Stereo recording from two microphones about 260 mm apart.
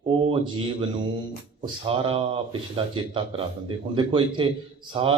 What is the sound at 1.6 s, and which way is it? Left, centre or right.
Speech, right.